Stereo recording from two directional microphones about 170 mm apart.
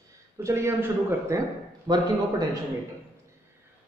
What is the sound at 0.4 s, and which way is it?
A man's voice, 15° right (ahead or behind).